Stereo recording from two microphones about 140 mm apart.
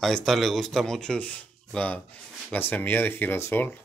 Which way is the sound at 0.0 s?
Centre (ahead or behind).